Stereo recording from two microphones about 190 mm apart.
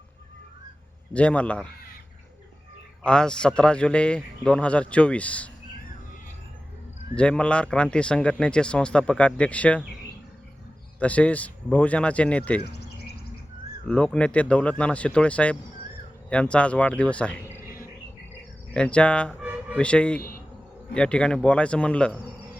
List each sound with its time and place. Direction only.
1.1 s speech: 5° left (ahead or behind)
3.0 s speech: 5° left (ahead or behind)
7.2 s speech: 5° left (ahead or behind)
11.0 s speech: 5° left (ahead or behind)
12.7 s bird: 60° left (ahead or behind)
13.8 s speech: 5° left (ahead or behind)
18.7 s speech: 5° left (ahead or behind)
19.3 s music: 5° right (ahead or behind)
19.7 s speech: 5° left (ahead or behind)